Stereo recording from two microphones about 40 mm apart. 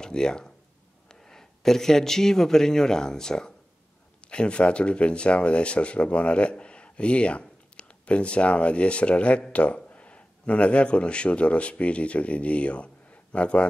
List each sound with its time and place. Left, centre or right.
0.0 s a man's voice: centre